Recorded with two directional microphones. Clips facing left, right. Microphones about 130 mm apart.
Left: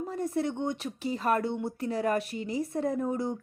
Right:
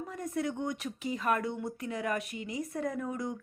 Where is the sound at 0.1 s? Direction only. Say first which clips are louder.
Left 3 dB; 30° left (ahead or behind).